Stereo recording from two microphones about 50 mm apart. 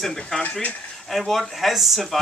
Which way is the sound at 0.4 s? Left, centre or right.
Left.